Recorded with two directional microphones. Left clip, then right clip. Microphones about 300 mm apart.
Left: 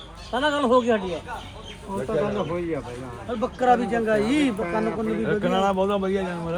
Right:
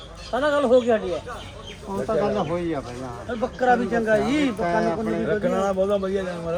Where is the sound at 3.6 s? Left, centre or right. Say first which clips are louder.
Even; left.